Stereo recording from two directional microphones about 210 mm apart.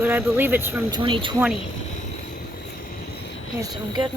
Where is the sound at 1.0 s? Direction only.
25° right (ahead or behind).